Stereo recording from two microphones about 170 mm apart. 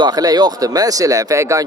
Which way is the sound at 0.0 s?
25° right (ahead or behind).